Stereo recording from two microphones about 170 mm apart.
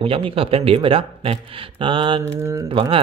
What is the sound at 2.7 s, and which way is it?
Speech, 35° right (ahead or behind).